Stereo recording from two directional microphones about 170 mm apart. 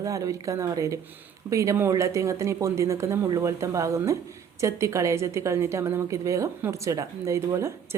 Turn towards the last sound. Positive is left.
turn(degrees=-15)  # may be behind; listen again after turning